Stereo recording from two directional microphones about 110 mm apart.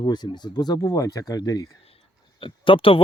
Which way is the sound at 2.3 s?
50° left (ahead or behind).